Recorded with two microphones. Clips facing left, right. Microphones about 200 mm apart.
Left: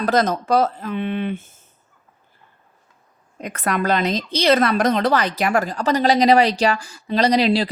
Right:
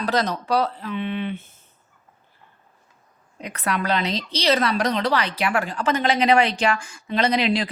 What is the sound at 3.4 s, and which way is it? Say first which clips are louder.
A woman's voice: left 4 dB; 45° left (ahead or behind).